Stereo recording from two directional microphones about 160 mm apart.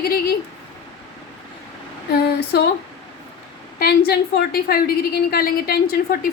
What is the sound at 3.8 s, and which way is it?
A woman's voice, 75° left (ahead or behind).